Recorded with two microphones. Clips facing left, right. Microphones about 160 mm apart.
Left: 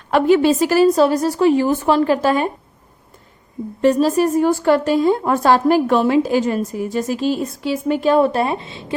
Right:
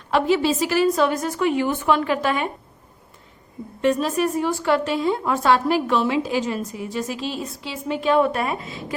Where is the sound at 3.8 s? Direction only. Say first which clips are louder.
Left 6 dB; 35° left (ahead or behind).